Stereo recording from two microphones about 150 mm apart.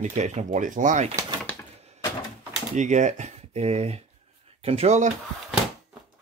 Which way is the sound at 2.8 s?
55° right (ahead or behind).